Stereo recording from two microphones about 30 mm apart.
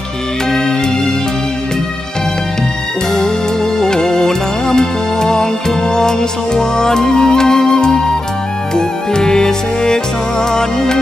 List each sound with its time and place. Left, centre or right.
3.8 s music: left